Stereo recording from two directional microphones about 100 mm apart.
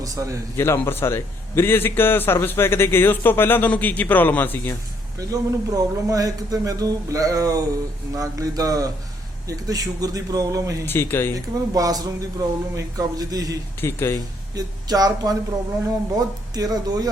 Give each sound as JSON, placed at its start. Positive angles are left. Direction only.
{"t": 0.0, "sound": "speech", "side_deg": -35}
{"t": 0.5, "sound": "a man's voice", "side_deg": 25}
{"t": 5.3, "sound": "speech", "side_deg": -35}
{"t": 10.8, "sound": "a man's voice", "side_deg": 20}
{"t": 11.3, "sound": "speech", "side_deg": -35}
{"t": 13.8, "sound": "a man's voice", "side_deg": 25}
{"t": 14.5, "sound": "speech", "side_deg": -40}